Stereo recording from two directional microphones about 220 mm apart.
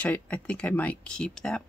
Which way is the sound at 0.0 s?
5° left (ahead or behind).